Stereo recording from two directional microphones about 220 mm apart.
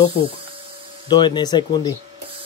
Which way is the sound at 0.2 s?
25° right (ahead or behind).